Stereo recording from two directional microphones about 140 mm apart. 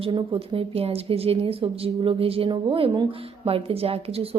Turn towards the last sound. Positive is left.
turn(degrees=-45)  # may be behind; listen again after turning